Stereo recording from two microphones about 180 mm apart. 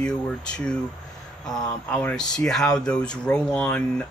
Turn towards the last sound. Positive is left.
turn(degrees=5)  # may be behind; listen again after turning